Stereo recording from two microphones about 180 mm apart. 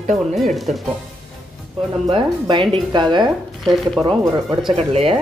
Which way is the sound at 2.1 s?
25° right (ahead or behind).